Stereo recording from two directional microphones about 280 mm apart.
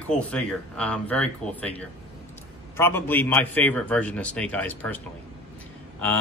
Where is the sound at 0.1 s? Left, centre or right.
Centre.